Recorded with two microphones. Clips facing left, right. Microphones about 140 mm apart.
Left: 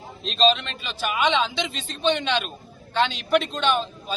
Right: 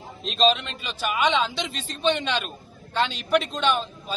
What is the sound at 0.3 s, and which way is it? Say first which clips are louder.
A man's voice: left 1 dB; 5° right (ahead or behind).